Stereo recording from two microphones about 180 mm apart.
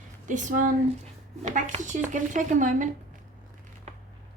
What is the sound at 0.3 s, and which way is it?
Speech, 45° right (ahead or behind).